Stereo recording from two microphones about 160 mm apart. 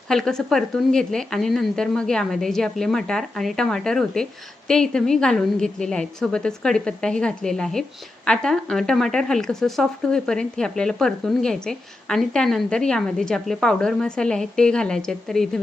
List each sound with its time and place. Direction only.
0.1 s a woman's voice: 5° left (ahead or behind)